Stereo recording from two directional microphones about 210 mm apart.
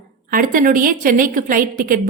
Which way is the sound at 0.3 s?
40° right (ahead or behind).